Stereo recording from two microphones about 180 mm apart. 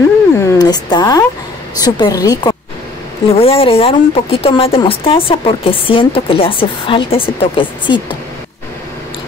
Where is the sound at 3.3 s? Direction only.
30° left (ahead or behind).